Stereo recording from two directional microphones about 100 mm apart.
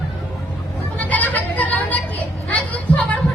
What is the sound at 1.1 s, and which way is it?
Speech, 15° left (ahead or behind).